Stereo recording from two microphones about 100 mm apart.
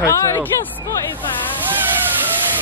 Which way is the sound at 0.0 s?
30° left (ahead or behind).